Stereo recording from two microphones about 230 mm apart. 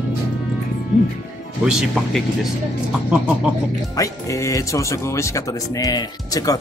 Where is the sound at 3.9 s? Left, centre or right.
Centre.